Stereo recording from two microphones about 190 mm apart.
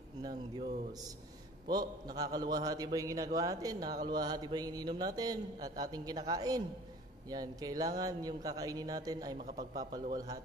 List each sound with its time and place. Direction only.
0.2 s speech: 20° right (ahead or behind)
1.7 s speech: 20° right (ahead or behind)